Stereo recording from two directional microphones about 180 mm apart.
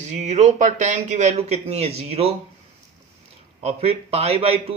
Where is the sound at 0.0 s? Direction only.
40° right (ahead or behind).